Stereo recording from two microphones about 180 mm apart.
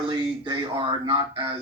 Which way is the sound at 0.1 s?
25° right (ahead or behind).